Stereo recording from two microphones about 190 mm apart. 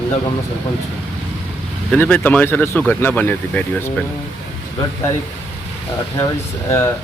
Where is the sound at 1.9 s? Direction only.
10° left (ahead or behind).